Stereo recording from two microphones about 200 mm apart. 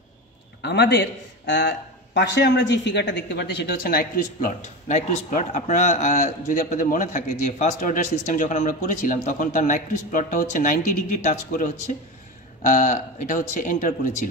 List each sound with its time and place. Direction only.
0.6 s a man's voice: 55° left (ahead or behind); by 14.3 s 40° left (ahead or behind)